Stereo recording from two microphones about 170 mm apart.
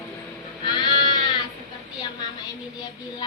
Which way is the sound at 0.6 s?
25° left (ahead or behind).